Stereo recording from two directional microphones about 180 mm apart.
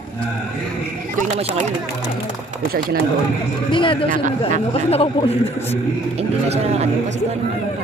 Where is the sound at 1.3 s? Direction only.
40° right (ahead or behind).